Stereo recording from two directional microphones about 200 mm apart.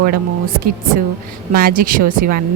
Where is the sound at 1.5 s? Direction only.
45° right (ahead or behind).